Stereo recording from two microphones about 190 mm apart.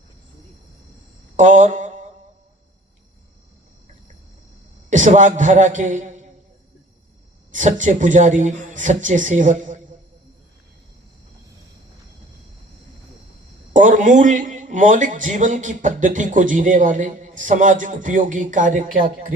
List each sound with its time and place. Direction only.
1.4 s mantra: 40° right (ahead or behind)
4.9 s speech: 40° right (ahead or behind)
7.5 s speech: 40° right (ahead or behind)
13.7 s speech: 40° right (ahead or behind)